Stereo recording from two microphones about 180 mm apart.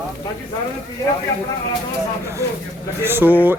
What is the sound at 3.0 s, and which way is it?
Speech, 10° right (ahead or behind).